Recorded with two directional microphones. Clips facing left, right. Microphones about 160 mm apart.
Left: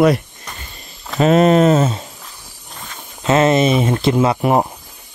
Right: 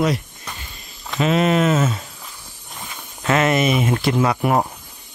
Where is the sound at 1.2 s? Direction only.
40° left (ahead or behind).